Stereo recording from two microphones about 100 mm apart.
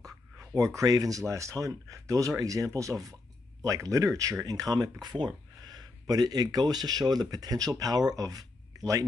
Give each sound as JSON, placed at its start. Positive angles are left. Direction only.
{"t": 0.7, "sound": "speech", "side_deg": -40}